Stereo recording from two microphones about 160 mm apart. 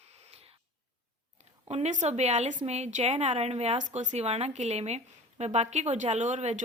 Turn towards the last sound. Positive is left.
turn(degrees=-45)  # may be behind; listen again after turning